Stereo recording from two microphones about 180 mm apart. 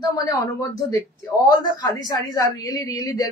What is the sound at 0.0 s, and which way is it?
A woman's voice, 20° left (ahead or behind).